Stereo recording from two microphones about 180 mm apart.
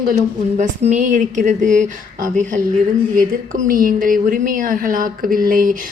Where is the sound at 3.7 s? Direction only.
50° right (ahead or behind).